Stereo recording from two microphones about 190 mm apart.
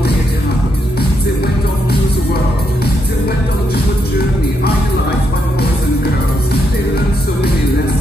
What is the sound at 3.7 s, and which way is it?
Music, 55° left (ahead or behind).